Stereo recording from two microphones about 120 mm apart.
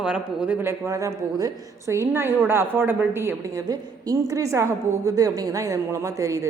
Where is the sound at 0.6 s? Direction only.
25° right (ahead or behind).